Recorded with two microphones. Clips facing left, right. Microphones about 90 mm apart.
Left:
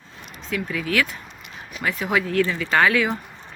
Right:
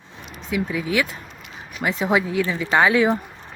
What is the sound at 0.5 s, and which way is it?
Speech, 15° right (ahead or behind).